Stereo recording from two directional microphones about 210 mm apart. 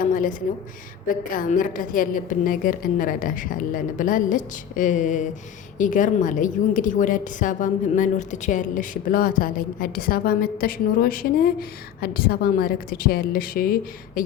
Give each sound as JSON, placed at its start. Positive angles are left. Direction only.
{"t": 0.1, "sound": "a woman's voice", "side_deg": 40}